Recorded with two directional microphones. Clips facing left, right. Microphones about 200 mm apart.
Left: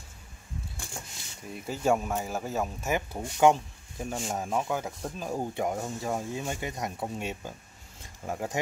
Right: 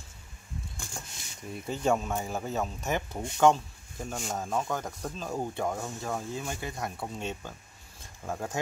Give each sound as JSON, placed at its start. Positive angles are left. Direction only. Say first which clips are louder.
{"t": 1.5, "sound": "speech", "louder": "left 1 dB", "side_deg": 5}